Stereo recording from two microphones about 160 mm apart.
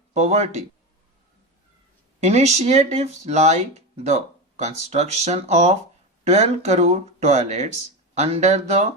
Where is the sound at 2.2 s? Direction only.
45° right (ahead or behind).